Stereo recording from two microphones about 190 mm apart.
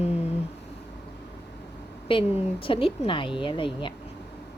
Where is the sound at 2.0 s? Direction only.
25° left (ahead or behind).